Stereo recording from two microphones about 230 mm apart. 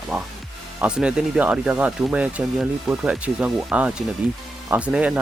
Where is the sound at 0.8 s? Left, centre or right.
Centre.